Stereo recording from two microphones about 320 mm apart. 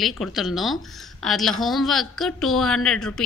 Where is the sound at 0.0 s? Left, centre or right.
Centre.